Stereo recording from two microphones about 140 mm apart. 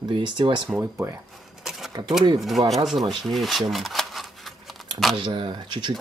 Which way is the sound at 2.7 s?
Centre (ahead or behind).